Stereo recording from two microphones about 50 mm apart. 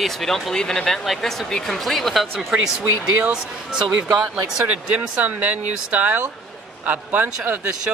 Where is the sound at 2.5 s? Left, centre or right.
Right.